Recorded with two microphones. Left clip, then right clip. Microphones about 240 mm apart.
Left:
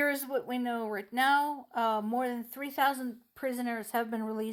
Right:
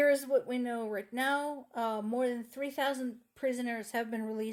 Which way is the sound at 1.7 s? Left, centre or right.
Left.